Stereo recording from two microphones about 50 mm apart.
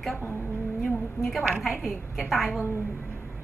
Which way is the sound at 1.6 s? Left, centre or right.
Centre.